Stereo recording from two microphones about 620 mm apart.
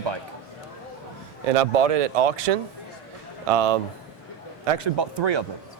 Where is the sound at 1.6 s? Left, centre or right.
Right.